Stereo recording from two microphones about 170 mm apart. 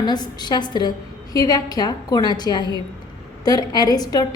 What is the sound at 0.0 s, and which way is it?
A woman's voice, 25° left (ahead or behind).